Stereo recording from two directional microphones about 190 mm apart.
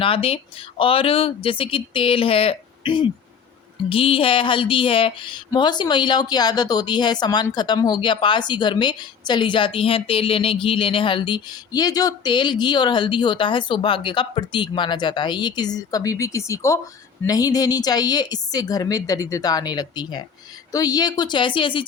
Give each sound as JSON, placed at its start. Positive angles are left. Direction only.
{"t": 0.0, "sound": "speech", "side_deg": 30}